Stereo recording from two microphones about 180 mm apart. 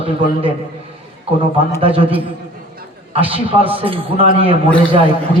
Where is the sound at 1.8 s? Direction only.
30° right (ahead or behind).